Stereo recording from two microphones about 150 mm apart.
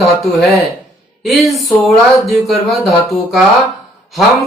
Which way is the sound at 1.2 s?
Centre (ahead or behind).